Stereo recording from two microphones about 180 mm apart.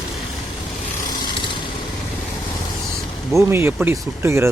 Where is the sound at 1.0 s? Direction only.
25° left (ahead or behind).